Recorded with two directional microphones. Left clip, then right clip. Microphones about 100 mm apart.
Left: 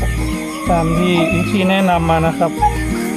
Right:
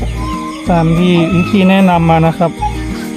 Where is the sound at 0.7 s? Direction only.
50° right (ahead or behind).